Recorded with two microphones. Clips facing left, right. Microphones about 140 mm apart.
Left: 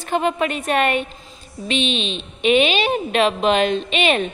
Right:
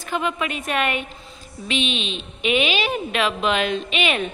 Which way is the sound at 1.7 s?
10° right (ahead or behind).